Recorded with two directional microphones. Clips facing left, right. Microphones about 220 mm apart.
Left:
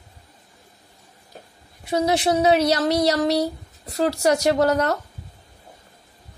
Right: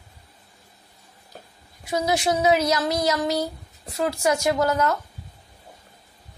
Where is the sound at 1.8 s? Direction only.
35° left (ahead or behind).